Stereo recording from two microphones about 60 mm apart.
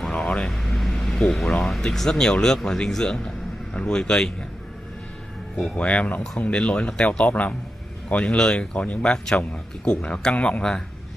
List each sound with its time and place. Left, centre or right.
0.0 s vehicle: centre
0.5 s vehicle: centre
2.0 s speech: centre
5.6 s speech: centre
9.0 s speech: centre